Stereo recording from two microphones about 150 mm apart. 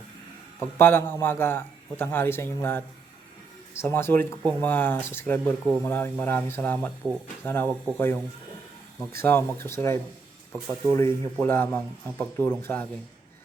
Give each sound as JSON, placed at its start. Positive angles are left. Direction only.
{"t": 0.6, "sound": "speech", "side_deg": 15}